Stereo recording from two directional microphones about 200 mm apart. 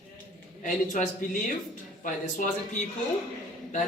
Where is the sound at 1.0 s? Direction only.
40° left (ahead or behind).